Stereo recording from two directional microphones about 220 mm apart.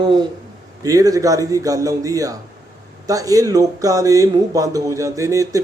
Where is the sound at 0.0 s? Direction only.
20° right (ahead or behind).